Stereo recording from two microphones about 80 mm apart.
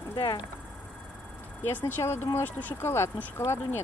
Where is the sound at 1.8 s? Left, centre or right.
Left.